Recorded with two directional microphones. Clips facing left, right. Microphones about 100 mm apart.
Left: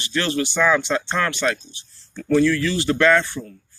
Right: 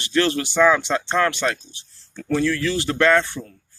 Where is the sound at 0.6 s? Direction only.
35° right (ahead or behind).